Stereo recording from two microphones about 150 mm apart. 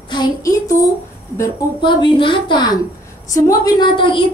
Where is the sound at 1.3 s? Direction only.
25° left (ahead or behind).